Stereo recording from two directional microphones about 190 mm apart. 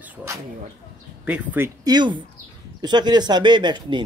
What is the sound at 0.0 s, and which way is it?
Speech, 15° right (ahead or behind).